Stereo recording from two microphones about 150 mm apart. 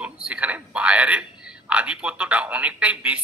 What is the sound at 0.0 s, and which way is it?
A man's voice, 5° right (ahead or behind).